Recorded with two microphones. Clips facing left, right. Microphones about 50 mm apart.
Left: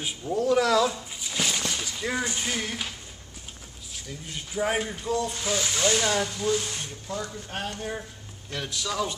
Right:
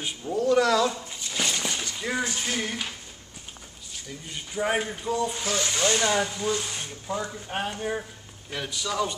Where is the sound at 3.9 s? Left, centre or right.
Centre.